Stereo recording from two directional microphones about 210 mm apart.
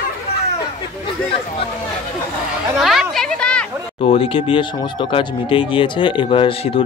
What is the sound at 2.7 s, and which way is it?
Speech, centre (ahead or behind).